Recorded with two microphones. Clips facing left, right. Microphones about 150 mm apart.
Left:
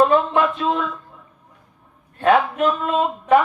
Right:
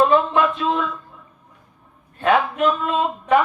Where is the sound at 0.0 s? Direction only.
40° left (ahead or behind).